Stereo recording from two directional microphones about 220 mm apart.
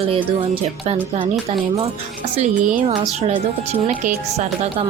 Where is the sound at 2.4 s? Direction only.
30° right (ahead or behind).